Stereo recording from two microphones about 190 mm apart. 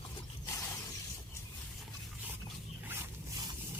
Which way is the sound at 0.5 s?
15° left (ahead or behind).